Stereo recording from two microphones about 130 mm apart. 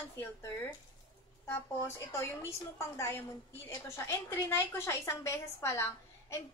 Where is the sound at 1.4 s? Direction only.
20° left (ahead or behind).